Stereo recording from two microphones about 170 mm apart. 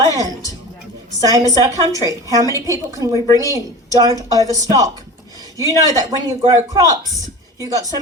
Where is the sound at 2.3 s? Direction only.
20° right (ahead or behind).